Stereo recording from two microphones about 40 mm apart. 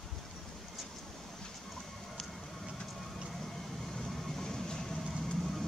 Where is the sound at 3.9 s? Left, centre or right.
Centre.